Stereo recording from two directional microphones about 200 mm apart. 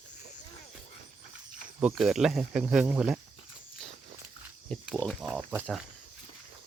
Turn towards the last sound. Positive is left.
turn(degrees=5)  # may be behind; listen again after turning